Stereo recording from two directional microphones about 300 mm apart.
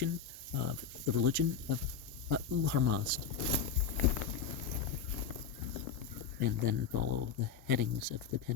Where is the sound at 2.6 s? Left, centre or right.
Right.